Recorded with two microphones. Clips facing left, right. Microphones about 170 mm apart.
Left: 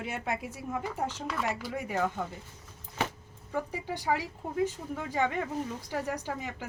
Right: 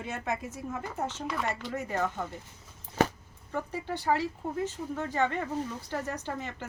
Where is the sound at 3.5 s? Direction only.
10° left (ahead or behind).